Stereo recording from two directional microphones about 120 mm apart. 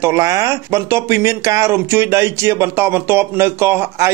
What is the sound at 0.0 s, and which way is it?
Speech, 25° right (ahead or behind).